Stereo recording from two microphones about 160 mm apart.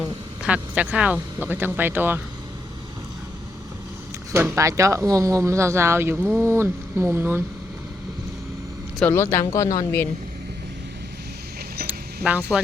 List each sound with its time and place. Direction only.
0.4 s speech: 10° right (ahead or behind)
4.3 s speech: 15° right (ahead or behind)
9.0 s a woman's voice: 15° left (ahead or behind)
11.9 s a sound: 10° right (ahead or behind)